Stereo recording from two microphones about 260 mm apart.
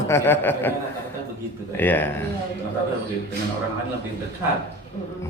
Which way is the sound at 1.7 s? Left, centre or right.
Centre.